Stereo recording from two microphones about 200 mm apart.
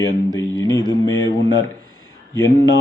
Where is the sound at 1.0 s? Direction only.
80° left.